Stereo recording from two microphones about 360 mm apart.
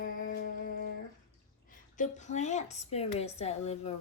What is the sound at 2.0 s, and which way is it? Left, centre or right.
A woman's voice, centre.